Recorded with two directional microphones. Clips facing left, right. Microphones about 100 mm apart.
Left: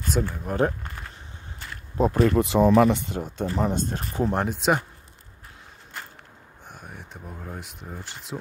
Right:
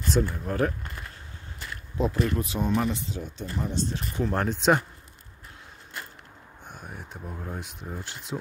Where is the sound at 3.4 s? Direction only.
80° left.